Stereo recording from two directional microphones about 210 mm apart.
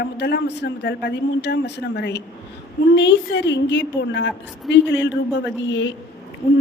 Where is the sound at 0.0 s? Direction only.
55° left (ahead or behind).